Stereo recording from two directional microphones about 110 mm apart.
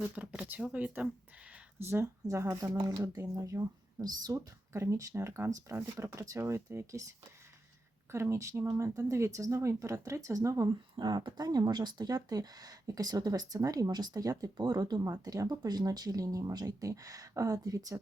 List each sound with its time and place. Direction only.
0.2 s speech: 15° right (ahead or behind)
1.8 s speech: 25° right (ahead or behind)
8.1 s speech: 25° right (ahead or behind)
10.9 s speech: 40° right (ahead or behind)